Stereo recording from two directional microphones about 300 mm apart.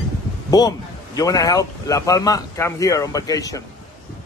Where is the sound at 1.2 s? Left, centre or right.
Centre.